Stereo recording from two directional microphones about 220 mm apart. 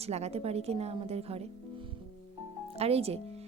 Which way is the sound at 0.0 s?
30° right (ahead or behind).